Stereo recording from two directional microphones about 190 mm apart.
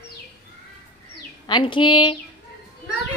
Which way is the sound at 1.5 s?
25° left (ahead or behind).